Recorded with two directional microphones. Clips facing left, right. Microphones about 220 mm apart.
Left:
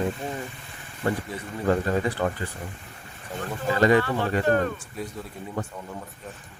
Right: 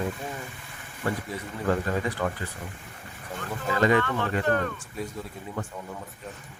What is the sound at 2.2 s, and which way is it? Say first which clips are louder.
Speech: left 3 dB; 30° left (ahead or behind).